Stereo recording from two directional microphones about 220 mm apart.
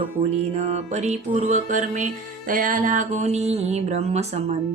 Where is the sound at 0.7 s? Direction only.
30° right (ahead or behind).